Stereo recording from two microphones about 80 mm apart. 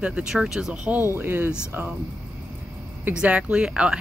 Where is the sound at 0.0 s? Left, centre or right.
Centre.